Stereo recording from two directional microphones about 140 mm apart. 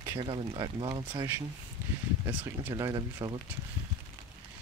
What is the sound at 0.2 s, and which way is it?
Speech, 35° right (ahead or behind).